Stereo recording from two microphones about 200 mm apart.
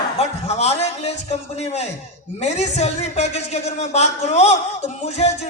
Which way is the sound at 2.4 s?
35° left (ahead or behind).